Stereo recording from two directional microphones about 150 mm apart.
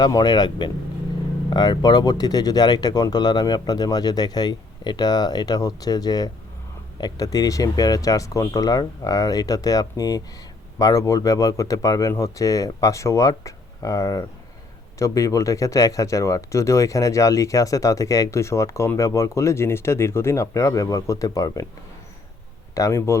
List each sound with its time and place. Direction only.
0.0 s speech: 25° left (ahead or behind)
22.7 s speech: 20° left (ahead or behind)